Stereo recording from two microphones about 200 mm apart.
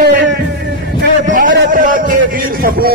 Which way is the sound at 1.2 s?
40° right (ahead or behind).